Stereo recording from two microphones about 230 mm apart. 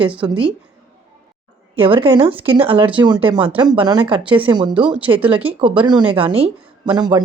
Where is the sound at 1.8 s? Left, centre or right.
Right.